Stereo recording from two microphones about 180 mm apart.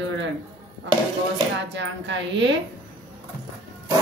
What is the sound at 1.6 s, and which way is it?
Speech, 85° right.